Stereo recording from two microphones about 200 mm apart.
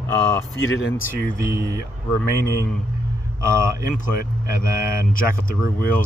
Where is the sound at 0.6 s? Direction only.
75° left (ahead or behind).